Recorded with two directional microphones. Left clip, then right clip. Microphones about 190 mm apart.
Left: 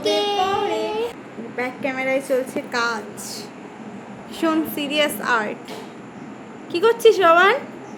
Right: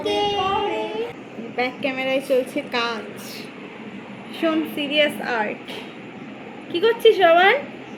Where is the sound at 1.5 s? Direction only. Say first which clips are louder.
Right 1 dB; 5° right (ahead or behind).